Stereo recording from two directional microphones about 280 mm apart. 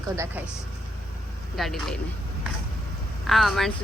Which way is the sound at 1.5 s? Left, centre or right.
Centre.